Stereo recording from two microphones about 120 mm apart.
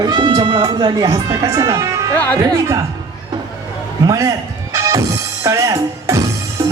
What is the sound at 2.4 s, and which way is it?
Speech, 30° right (ahead or behind).